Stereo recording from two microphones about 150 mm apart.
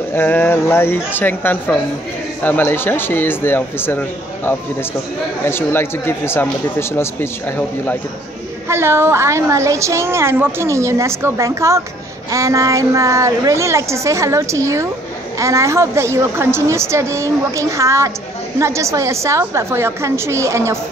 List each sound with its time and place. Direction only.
0.1 s speech: 15° left (ahead or behind)
5.4 s speech: 15° left (ahead or behind)
8.6 s a woman's voice: 15° right (ahead or behind)